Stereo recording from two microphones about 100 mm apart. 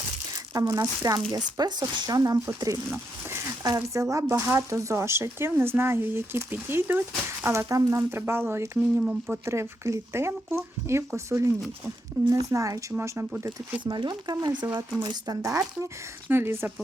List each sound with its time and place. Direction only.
0.5 s speech: 35° right (ahead or behind)
2.9 s a sound: 25° right (ahead or behind)
3.8 s speech: 30° right (ahead or behind)
13.4 s speech: 20° right (ahead or behind)
13.8 s speech: 50° right (ahead or behind)
15.4 s speech: 30° right (ahead or behind)